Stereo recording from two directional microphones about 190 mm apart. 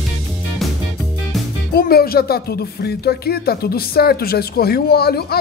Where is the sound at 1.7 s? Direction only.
55° left (ahead or behind).